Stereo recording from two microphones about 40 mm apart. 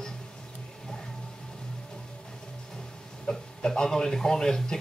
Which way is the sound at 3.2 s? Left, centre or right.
Centre.